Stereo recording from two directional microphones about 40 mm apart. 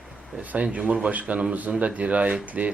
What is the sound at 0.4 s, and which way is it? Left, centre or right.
Speech, right.